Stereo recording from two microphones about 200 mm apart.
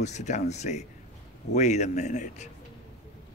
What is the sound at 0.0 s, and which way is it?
A man's voice, 35° left (ahead or behind).